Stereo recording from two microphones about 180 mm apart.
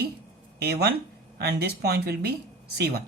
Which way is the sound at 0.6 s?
65° right (ahead or behind).